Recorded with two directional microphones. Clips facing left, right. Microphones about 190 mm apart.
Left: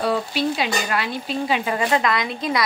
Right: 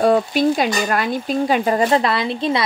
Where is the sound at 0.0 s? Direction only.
45° right (ahead or behind).